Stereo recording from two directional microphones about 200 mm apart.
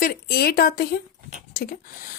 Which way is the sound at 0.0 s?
50° left (ahead or behind).